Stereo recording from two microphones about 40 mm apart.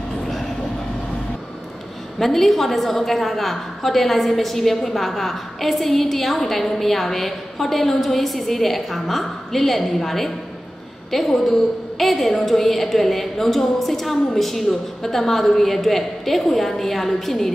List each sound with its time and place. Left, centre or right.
2.1 s a woman's voice: centre